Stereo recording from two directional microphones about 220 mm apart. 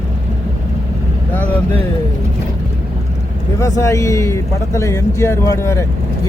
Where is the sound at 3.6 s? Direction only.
15° left (ahead or behind).